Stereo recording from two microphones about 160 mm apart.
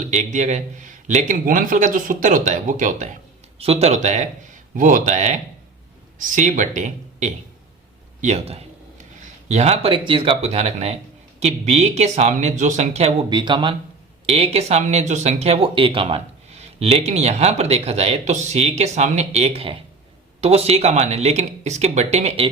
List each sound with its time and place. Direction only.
0.0 s a man's voice: 50° right (ahead or behind)
3.6 s a man's voice: 40° right (ahead or behind)
13.3 s a man's voice: 30° right (ahead or behind)